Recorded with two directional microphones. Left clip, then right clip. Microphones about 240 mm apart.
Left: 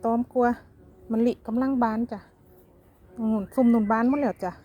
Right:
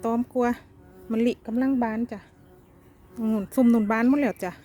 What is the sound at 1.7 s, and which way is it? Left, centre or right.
Speech, right.